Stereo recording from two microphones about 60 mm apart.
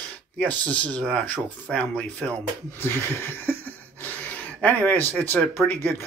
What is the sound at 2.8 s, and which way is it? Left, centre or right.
Speech, left.